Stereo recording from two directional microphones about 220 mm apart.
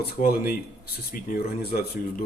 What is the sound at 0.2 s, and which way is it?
Speech, 40° left (ahead or behind).